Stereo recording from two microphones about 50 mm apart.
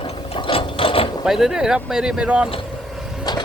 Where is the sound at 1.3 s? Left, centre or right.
Centre.